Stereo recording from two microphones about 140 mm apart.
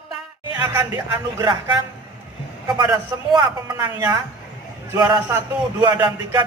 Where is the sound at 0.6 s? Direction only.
20° right (ahead or behind).